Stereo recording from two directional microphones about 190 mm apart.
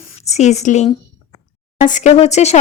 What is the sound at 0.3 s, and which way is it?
Speech, 35° left (ahead or behind).